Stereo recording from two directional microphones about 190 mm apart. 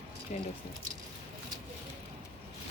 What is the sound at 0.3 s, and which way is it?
Speech, 40° left (ahead or behind).